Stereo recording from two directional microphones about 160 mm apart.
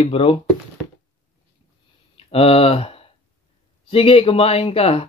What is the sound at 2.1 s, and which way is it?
Speech, 35° left (ahead or behind).